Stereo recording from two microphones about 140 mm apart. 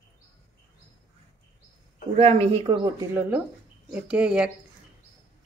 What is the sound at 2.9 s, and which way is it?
Speech, 20° right (ahead or behind).